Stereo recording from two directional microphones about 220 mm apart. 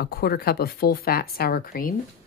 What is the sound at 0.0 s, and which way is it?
Speech, 45° left (ahead or behind).